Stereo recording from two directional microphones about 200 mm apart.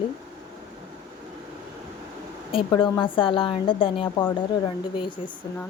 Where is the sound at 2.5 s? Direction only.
25° left (ahead or behind).